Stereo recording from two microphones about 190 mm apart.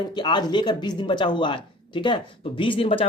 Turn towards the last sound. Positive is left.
turn(degrees=30)  # may be behind; listen again after turning